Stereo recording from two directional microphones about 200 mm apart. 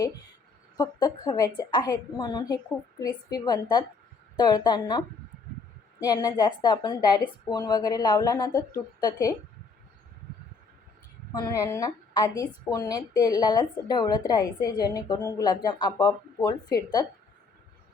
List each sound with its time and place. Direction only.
0.8 s a woman's voice: 20° left (ahead or behind)
11.3 s a woman's voice: 20° left (ahead or behind)